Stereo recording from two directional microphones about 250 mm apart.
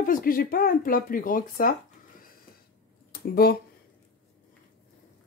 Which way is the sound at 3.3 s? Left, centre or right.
Left.